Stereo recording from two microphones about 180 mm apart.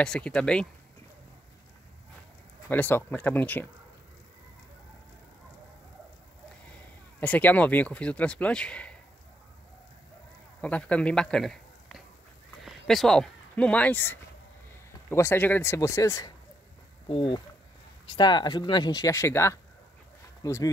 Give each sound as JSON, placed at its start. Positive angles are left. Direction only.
{"t": 0.0, "sound": "speech", "side_deg": 5}
{"t": 2.7, "sound": "speech", "side_deg": 10}
{"t": 7.2, "sound": "speech", "side_deg": 10}
{"t": 10.6, "sound": "a man's voice", "side_deg": 5}
{"t": 17.1, "sound": "speech", "side_deg": 30}